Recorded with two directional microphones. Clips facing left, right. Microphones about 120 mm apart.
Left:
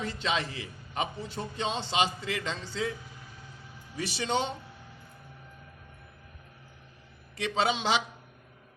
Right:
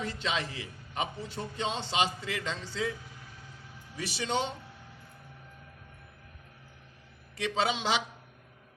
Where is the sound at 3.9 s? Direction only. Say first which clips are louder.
Left 2 dB; 30° left (ahead or behind).